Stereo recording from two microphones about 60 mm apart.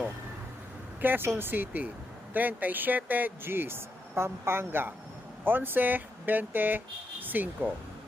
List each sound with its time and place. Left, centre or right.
1.0 s speech: right